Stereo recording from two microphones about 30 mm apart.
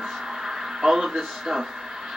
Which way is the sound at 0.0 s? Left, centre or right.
Centre.